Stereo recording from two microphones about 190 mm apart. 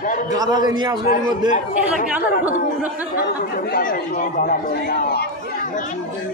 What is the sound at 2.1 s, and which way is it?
Speech, 10° right (ahead or behind).